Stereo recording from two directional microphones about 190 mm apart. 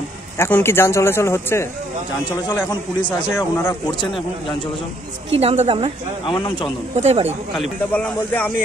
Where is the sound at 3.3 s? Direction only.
10° left (ahead or behind).